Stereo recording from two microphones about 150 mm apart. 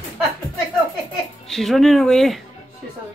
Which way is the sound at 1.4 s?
Centre (ahead or behind).